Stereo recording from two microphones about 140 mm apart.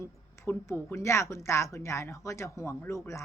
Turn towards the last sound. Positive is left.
turn(degrees=20)  # may be behind; listen again after turning